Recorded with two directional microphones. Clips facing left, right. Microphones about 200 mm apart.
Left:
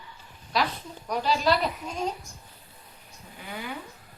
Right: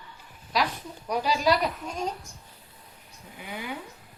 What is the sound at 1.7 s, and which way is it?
Speech, centre (ahead or behind).